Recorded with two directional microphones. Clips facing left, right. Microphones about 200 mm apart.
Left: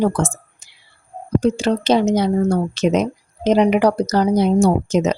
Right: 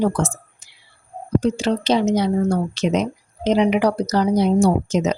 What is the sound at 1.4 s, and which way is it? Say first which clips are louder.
A woman's voice: left 2 dB; 45° left (ahead or behind).